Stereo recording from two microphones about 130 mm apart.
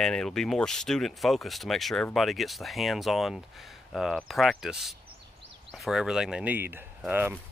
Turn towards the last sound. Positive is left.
turn(degrees=-15)  # may be behind; listen again after turning